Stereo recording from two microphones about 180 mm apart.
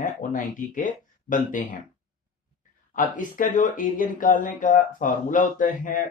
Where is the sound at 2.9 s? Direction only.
45° left (ahead or behind).